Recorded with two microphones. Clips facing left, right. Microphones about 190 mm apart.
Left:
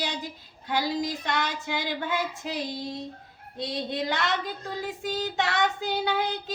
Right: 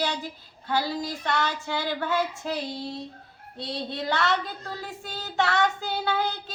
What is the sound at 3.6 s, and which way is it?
Child singing, 15° left (ahead or behind).